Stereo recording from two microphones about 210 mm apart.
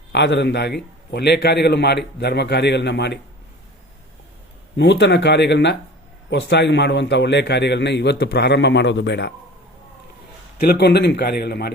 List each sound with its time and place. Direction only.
0.1 s a man's voice: 55° left (ahead or behind)
4.8 s a man's voice: 55° left (ahead or behind)
10.6 s a man's voice: 50° left (ahead or behind)